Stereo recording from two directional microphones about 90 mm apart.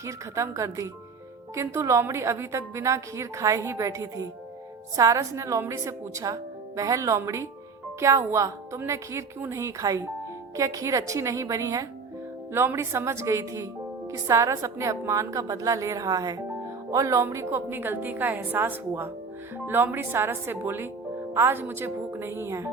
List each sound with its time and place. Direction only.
0.0 s a woman's voice: 35° right (ahead or behind)